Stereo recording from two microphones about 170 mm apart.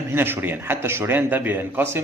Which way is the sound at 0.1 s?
15° right (ahead or behind).